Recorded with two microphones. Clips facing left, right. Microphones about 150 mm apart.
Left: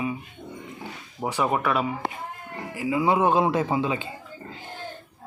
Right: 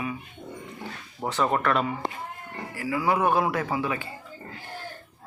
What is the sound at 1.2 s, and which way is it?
Speech, 10° left (ahead or behind).